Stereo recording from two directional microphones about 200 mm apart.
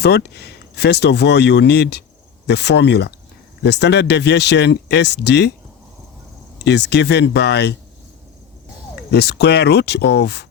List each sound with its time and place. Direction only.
0.0 s speech: 55° left (ahead or behind)
6.7 s speech: 60° left (ahead or behind)
9.0 s speech: 55° left (ahead or behind)